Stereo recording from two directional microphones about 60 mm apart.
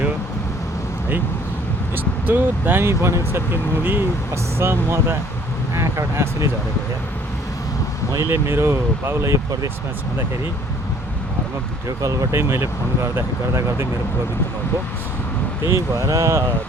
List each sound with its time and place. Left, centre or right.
2.2 s speech: right
3.5 s speech: right
8.2 s speech: right
12.0 s speech: right
12.3 s speech: right
15.6 s speech: right